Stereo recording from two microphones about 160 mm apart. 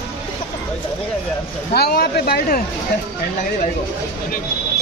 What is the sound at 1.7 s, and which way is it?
Speech, 80° left.